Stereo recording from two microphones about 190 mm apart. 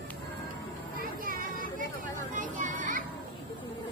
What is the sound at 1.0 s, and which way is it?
Chatter, 50° right (ahead or behind).